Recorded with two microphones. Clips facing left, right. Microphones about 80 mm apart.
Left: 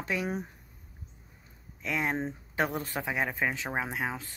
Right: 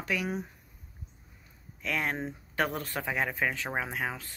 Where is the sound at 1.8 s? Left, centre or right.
Centre.